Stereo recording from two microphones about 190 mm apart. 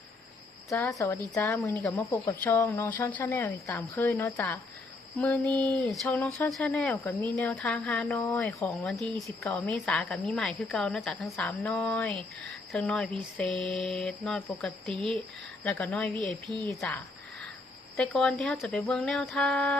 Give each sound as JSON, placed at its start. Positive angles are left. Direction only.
{"t": 0.7, "sound": "a woman's voice", "side_deg": 15}
{"t": 17.9, "sound": "a woman's voice", "side_deg": 5}